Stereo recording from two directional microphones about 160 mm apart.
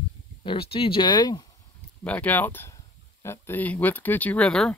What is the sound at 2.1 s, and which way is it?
Speech, 10° left (ahead or behind).